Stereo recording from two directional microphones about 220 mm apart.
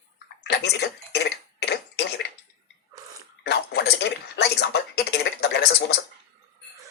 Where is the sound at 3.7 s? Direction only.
50° left (ahead or behind).